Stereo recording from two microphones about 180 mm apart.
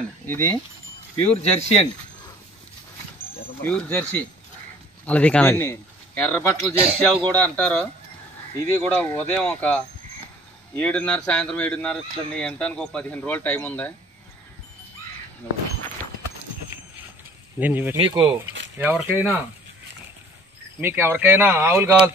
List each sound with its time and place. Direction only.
0.3 s speech: 15° left (ahead or behind)
1.1 s speech: 35° left (ahead or behind)
3.6 s speech: 10° left (ahead or behind)
17.6 s speech: 10° right (ahead or behind)
17.9 s speech: 20° right (ahead or behind)
20.8 s speech: 10° right (ahead or behind)